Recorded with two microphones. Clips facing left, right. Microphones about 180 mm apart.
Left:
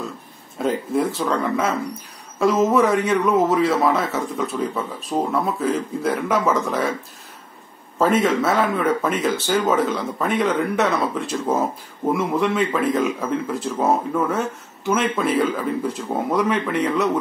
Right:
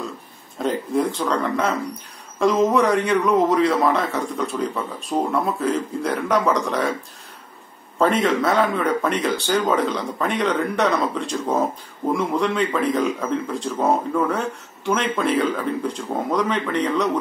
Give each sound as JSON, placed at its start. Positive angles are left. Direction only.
{"t": 0.6, "sound": "a man's voice", "side_deg": 5}
{"t": 8.0, "sound": "a man's voice", "side_deg": 0}